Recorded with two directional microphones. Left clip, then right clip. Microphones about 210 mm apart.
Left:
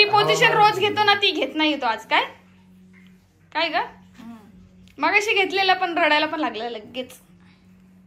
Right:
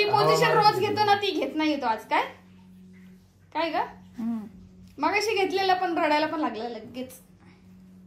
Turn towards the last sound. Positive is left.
turn(degrees=0)  # may be behind; listen again after turning